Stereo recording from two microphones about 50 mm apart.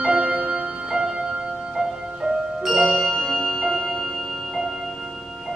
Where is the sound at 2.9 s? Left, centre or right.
Centre.